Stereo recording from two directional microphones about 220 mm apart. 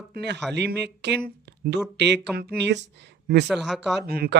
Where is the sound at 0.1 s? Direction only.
50° right (ahead or behind).